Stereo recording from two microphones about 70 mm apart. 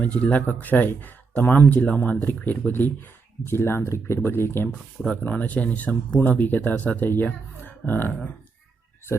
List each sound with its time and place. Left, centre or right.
0.0 s speech: left
5.1 s speech: left